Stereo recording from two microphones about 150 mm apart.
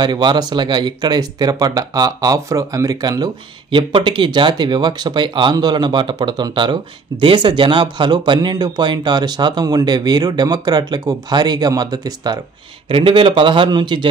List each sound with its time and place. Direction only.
0.0 s a man's voice: 30° right (ahead or behind)